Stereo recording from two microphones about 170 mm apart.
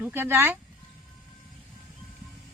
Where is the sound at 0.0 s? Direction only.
15° right (ahead or behind).